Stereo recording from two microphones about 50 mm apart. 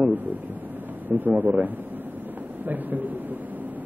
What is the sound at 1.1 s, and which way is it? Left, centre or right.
A man's voice, right.